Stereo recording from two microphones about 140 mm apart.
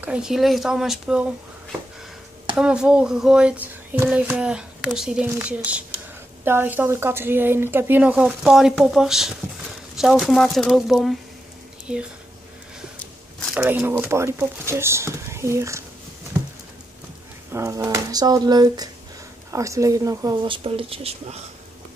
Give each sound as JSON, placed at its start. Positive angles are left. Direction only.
{"t": 0.0, "sound": "speech", "side_deg": -5}
{"t": 2.5, "sound": "a woman's voice", "side_deg": -5}
{"t": 13.6, "sound": "a woman's voice", "side_deg": -10}
{"t": 17.5, "sound": "speech", "side_deg": -20}
{"t": 20.4, "sound": "speech", "side_deg": -40}